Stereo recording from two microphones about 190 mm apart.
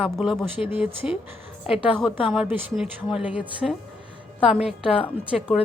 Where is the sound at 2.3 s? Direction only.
5° right (ahead or behind).